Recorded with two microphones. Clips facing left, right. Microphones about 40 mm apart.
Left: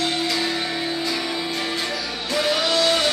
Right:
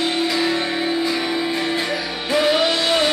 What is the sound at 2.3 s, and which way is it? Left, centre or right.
Music, right.